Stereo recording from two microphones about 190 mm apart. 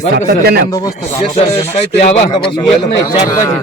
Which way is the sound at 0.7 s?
20° left (ahead or behind).